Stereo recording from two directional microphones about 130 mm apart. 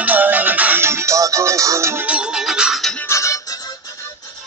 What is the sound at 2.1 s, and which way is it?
Music, 5° right (ahead or behind).